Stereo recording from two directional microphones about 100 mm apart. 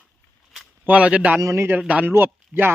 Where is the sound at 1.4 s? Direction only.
30° right (ahead or behind).